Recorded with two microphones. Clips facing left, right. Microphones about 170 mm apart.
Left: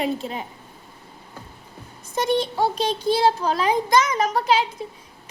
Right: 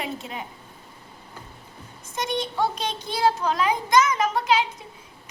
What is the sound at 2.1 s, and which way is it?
A woman's voice, 30° left (ahead or behind).